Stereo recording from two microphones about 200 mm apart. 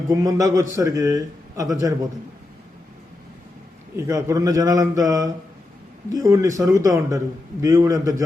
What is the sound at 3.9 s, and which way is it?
A man's voice, 15° right (ahead or behind).